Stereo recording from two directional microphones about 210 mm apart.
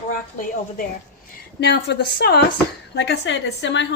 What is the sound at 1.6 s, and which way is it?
A woman's voice, 55° left (ahead or behind).